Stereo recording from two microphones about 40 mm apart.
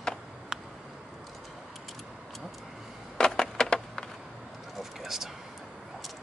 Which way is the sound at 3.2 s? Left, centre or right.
Centre.